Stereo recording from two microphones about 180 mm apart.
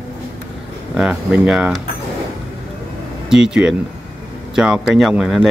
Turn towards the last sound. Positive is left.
turn(degrees=0)  # may be behind; listen again after turning